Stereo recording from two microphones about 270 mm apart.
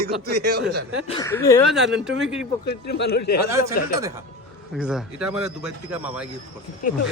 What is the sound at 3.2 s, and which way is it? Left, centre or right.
Speech, left.